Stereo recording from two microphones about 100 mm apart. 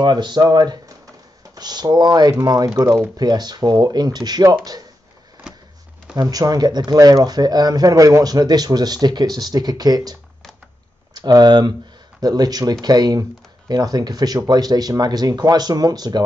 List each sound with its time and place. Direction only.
0.0 s speech: 45° right (ahead or behind)
6.1 s speech: 40° right (ahead or behind)
11.1 s speech: 45° right (ahead or behind)